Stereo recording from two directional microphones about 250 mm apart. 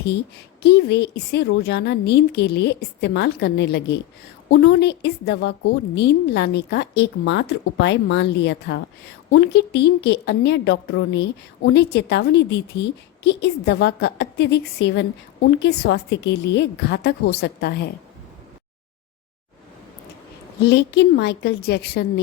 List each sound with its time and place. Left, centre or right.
0.6 s a woman's voice: left
20.6 s a woman's voice: left